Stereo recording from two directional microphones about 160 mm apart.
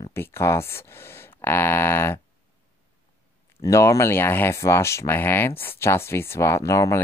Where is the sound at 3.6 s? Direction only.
20° left (ahead or behind).